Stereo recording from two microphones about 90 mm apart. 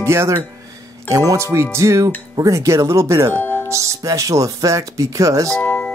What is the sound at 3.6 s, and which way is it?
Speech, 35° right (ahead or behind).